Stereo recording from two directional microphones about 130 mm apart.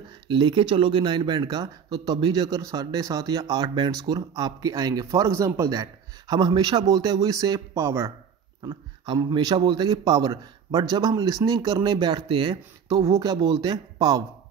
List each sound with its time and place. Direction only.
0.3 s speech: 40° right (ahead or behind); by 8.1 s 20° right (ahead or behind)
8.6 s a man's voice: 35° right (ahead or behind)